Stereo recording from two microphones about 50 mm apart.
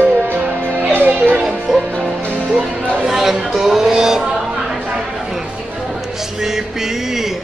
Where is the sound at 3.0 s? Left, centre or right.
Centre.